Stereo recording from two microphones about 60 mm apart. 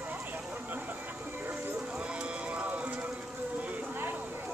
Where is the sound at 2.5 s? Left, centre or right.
Right.